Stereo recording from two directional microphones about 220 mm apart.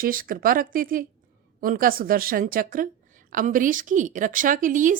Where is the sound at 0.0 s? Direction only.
40° right (ahead or behind).